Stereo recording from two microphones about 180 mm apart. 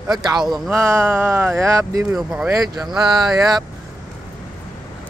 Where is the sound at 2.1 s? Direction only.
5° right (ahead or behind).